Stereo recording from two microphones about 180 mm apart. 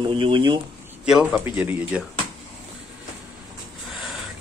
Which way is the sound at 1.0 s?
Centre (ahead or behind).